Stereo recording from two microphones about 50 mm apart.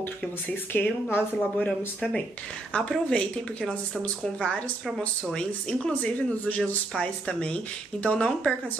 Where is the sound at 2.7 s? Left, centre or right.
Left.